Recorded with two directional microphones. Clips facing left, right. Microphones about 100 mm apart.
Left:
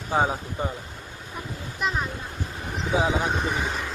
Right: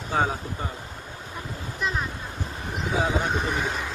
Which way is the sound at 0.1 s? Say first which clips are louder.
Left 2 dB; 20° left (ahead or behind).